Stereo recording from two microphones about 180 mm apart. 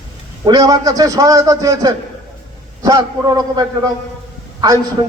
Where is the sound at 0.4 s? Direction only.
20° right (ahead or behind).